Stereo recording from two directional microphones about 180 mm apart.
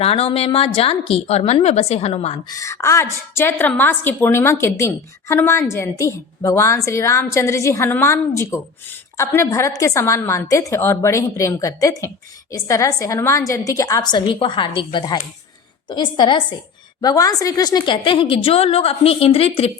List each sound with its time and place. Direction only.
0.0 s a woman's voice: 30° left (ahead or behind)
2.5 s a woman's voice: 15° left (ahead or behind)